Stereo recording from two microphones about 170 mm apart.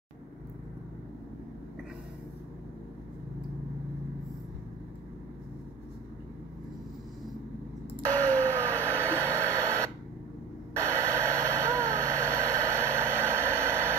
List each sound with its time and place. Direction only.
8.1 s vehicle: 10° left (ahead or behind)
9.0 s radio: 15° right (ahead or behind)
10.8 s vehicle: 15° right (ahead or behind)